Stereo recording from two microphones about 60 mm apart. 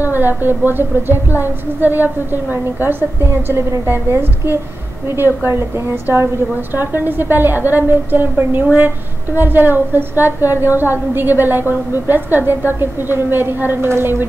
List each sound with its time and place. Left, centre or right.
0.0 s a woman's voice: right
6.7 s a woman's voice: right